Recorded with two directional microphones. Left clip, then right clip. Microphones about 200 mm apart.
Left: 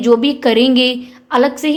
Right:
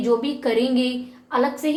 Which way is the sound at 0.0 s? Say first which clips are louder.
Left 9 dB; 50° left (ahead or behind).